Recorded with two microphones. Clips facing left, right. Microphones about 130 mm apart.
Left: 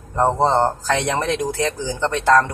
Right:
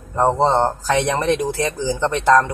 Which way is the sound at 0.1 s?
10° right (ahead or behind).